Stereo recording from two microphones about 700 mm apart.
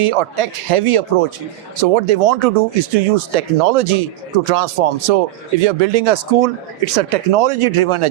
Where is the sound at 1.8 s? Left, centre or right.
Right.